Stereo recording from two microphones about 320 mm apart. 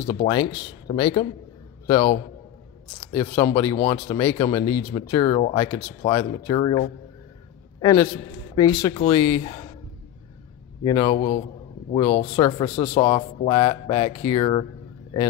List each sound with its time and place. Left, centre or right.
0.1 s speech: centre
7.8 s a man's voice: centre
10.8 s speech: centre